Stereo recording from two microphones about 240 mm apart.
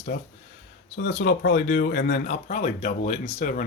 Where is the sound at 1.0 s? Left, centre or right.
Left.